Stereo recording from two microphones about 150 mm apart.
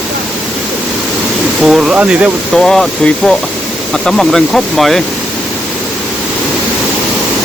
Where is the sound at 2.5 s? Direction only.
5° left (ahead or behind).